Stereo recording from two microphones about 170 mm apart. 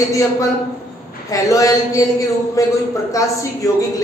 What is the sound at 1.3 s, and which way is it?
Speech, 20° left (ahead or behind).